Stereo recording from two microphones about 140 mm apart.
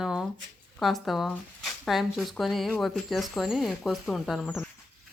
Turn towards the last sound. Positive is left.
turn(degrees=0)  # may be behind; listen again after turning